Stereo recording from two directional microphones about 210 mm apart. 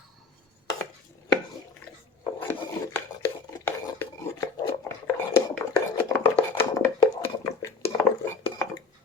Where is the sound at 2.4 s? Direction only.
10° left (ahead or behind).